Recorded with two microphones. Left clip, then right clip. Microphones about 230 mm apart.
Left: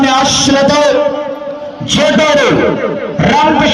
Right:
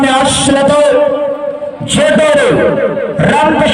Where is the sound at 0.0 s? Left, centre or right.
Right.